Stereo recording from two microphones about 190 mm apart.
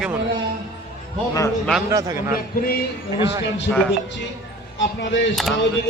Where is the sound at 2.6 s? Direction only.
55° left (ahead or behind).